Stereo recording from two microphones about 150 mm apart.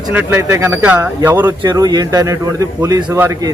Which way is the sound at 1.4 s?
30° right (ahead or behind).